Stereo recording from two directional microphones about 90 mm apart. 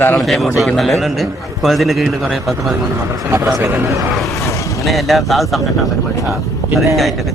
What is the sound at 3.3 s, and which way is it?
Speech, 40° right (ahead or behind).